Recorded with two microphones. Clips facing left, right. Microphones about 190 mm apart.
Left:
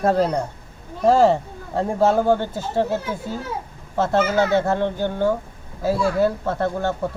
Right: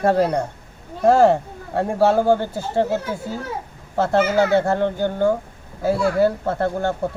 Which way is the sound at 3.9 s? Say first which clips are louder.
Right 1 dB; 35° right (ahead or behind).